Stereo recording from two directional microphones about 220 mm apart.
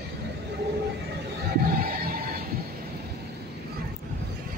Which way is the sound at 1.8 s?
45° right (ahead or behind).